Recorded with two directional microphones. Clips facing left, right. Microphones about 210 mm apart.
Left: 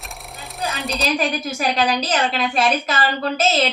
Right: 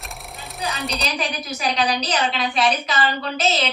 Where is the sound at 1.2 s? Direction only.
45° left (ahead or behind).